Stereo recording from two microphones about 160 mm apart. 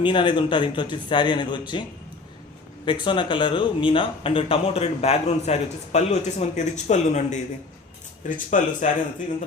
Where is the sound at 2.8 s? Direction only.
30° left (ahead or behind); by 8.9 s 50° left (ahead or behind).